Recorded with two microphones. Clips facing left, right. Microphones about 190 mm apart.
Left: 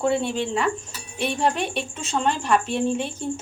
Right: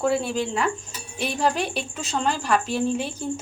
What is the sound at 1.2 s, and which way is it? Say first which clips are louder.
Speech: left 1 dB; 30° left (ahead or behind).